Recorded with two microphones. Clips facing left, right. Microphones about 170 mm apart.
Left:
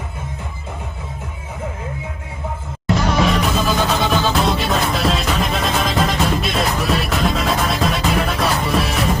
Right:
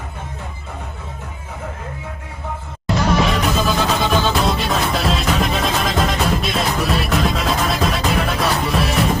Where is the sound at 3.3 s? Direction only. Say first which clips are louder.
Even; centre (ahead or behind).